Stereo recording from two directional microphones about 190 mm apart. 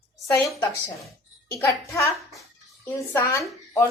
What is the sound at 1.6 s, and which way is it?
A woman's voice, 15° left (ahead or behind).